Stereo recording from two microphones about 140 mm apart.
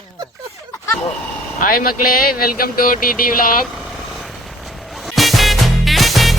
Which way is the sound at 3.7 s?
Centre (ahead or behind).